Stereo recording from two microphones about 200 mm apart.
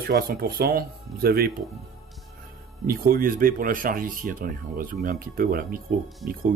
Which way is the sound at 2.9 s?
45° right (ahead or behind).